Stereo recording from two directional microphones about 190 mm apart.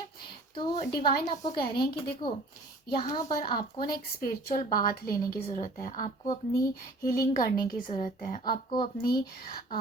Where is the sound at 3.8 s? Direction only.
50° left (ahead or behind).